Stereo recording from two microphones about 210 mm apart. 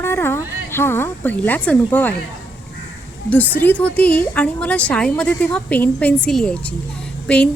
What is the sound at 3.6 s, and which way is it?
A woman's voice, 10° left (ahead or behind).